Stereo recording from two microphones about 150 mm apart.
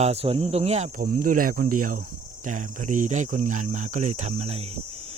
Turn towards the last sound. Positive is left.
turn(degrees=-45)  # may be behind; listen again after turning